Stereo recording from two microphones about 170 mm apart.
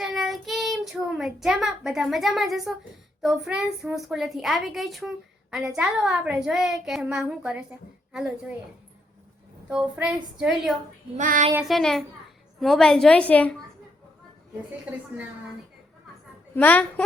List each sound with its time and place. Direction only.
0.0 s child singing: centre (ahead or behind)
3.2 s a woman's voice: centre (ahead or behind)
9.6 s a woman's voice: 5° right (ahead or behind)
11.2 s child singing: 50° right (ahead or behind)
11.6 s a woman's voice: centre (ahead or behind)
14.9 s a woman's voice: 10° right (ahead or behind)
16.6 s a woman's voice: 10° left (ahead or behind)